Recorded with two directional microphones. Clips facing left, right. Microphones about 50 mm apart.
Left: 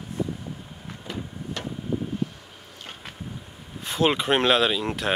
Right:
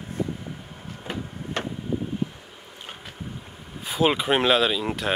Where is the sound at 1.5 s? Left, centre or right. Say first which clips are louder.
Right 5 dB; right.